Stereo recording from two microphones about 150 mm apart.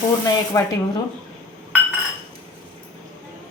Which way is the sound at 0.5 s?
20° left (ahead or behind).